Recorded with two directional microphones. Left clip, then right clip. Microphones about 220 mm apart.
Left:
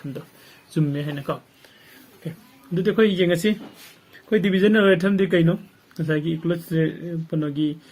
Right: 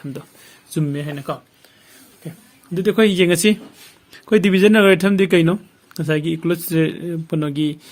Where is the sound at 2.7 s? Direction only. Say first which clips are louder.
Right 3 dB; 30° right (ahead or behind).